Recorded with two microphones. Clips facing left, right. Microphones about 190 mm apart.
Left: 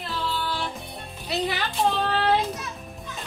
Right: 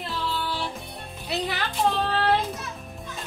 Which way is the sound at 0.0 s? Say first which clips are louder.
Even; centre (ahead or behind).